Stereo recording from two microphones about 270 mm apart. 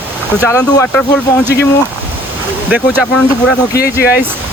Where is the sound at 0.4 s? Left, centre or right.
Centre.